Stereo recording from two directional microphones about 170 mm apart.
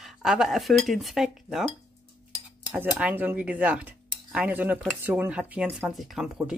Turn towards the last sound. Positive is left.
turn(degrees=0)  # may be behind; listen again after turning